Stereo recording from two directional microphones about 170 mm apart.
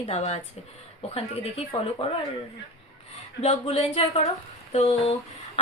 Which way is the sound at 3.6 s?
35° left (ahead or behind).